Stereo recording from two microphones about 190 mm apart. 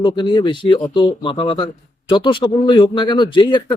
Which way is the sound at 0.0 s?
25° left (ahead or behind).